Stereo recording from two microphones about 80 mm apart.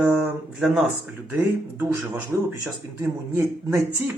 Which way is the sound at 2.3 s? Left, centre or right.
Right.